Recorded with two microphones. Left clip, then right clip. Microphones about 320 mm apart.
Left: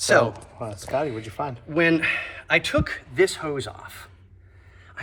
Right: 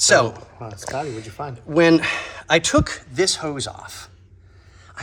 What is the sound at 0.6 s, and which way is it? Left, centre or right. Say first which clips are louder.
Speech: left 2 dB; left.